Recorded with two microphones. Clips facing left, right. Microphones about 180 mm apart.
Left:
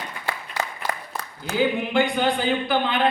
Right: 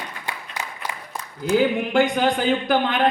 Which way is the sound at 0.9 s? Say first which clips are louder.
Left 3 dB; 65° left (ahead or behind).